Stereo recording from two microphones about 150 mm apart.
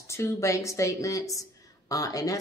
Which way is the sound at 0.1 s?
20° left (ahead or behind).